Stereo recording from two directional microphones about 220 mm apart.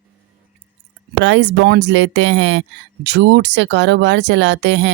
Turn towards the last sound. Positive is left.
turn(degrees=-55)  # may be behind; listen again after turning